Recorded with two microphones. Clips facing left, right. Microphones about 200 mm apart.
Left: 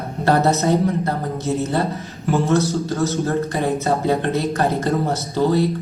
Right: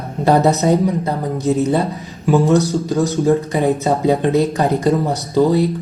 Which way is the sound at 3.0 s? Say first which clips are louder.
Right 5 dB; 15° right (ahead or behind).